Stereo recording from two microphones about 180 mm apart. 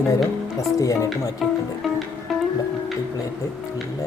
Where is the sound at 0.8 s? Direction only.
20° left (ahead or behind).